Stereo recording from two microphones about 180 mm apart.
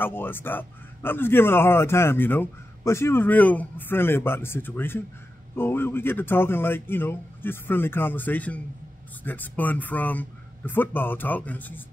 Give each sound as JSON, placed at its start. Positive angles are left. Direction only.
{"t": 0.0, "sound": "speech", "side_deg": 10}